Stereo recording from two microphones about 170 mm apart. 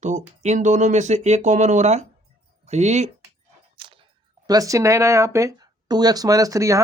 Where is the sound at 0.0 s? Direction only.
45° right (ahead or behind).